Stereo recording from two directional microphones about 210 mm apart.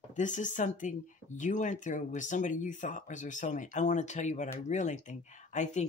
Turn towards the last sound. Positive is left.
turn(degrees=35)  # may be behind; listen again after turning